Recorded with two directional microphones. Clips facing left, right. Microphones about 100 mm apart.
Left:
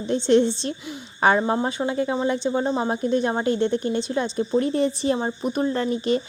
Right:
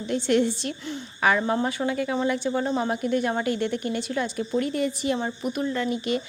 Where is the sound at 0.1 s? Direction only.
25° left (ahead or behind).